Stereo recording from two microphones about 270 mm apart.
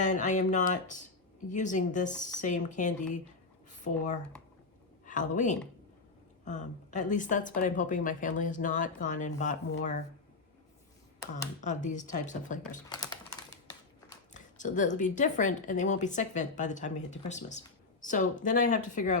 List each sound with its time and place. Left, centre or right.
0.0 s speech: left
5.0 s a sound: left
6.4 s speech: left
11.6 s speech: left
12.9 s speech: centre
14.3 s speech: left